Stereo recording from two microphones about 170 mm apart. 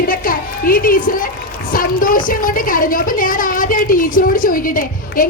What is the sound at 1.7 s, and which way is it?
A woman's voice, 55° left (ahead or behind).